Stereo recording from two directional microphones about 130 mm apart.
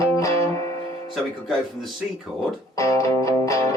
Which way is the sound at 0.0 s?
25° left (ahead or behind).